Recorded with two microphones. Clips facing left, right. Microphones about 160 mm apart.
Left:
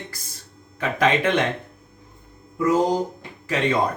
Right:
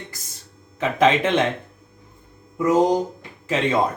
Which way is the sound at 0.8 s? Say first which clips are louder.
Right 3 dB; 25° right (ahead or behind).